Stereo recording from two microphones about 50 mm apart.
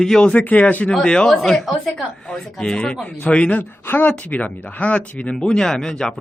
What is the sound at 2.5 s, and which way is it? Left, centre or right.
Speech, centre.